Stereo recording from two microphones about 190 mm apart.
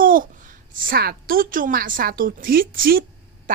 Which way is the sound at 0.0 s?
45° right (ahead or behind).